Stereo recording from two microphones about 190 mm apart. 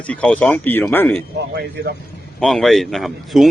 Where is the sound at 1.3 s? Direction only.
60° right (ahead or behind).